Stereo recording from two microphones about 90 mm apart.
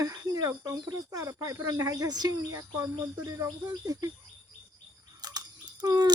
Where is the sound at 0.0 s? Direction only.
40° right (ahead or behind).